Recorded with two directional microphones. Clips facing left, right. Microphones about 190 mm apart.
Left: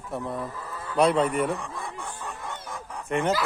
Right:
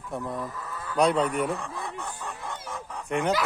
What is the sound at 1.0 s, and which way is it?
Speech, 5° left (ahead or behind).